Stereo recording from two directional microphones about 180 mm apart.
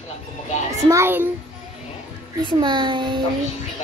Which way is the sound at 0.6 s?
15° right (ahead or behind).